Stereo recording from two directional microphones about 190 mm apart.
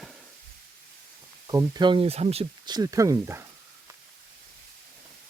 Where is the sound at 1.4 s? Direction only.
20° right (ahead or behind).